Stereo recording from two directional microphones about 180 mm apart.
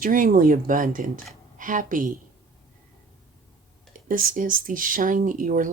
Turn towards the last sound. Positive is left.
turn(degrees=-45)  # may be behind; listen again after turning